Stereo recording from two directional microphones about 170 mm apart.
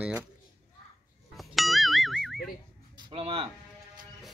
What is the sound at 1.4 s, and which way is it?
Music, centre (ahead or behind).